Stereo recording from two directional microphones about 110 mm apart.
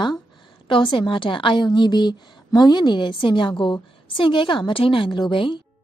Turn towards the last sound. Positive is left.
turn(degrees=45)  # may be behind; listen again after turning